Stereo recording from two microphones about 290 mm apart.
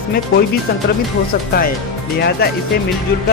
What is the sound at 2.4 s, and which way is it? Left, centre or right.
Speech, left.